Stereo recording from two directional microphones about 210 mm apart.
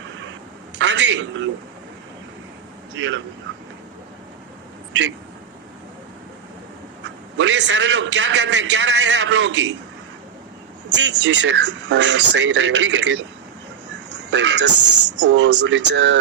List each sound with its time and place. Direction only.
0.8 s a sound: 60° right (ahead or behind)
2.9 s speech: 60° right (ahead or behind)
7.0 s a man's voice: 60° right (ahead or behind)
10.9 s a man's voice: 60° right (ahead or behind)
14.1 s a sound: 60° right (ahead or behind)
15.2 s a man's voice: 55° right (ahead or behind)